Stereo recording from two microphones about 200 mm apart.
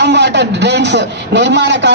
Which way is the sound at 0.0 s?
60° right (ahead or behind).